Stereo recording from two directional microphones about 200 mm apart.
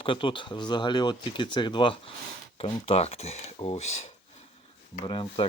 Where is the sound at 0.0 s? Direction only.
25° left (ahead or behind).